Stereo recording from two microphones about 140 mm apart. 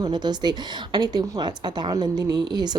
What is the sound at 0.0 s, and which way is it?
A woman's voice, 30° right (ahead or behind).